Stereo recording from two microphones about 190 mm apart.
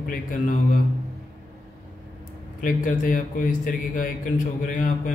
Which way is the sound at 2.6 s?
45° left (ahead or behind).